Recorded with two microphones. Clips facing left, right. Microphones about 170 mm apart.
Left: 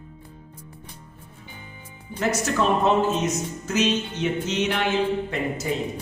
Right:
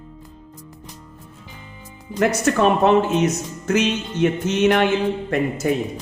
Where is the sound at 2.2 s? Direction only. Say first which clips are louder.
Right 6 dB; 60° right (ahead or behind).